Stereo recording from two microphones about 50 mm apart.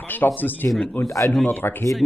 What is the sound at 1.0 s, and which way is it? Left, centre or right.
Speech, left.